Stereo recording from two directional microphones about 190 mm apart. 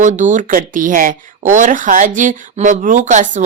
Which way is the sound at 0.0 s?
40° right (ahead or behind).